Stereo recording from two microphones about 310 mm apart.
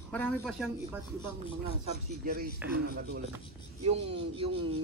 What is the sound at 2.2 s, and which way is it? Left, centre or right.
Speech, right.